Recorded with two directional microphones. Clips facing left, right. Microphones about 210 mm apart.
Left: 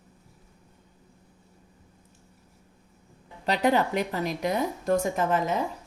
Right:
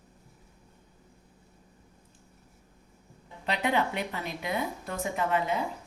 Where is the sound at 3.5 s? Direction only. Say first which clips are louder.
Left 5 dB; 40° left (ahead or behind).